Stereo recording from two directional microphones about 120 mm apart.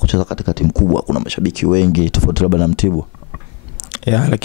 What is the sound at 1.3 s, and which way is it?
Speech, 10° left (ahead or behind).